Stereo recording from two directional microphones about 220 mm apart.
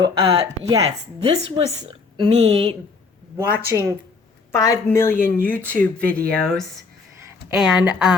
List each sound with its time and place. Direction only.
0.0 s speech: 20° right (ahead or behind)
3.7 s speech: 15° right (ahead or behind)
4.5 s speech: 15° left (ahead or behind); by 8.1 s 5° right (ahead or behind)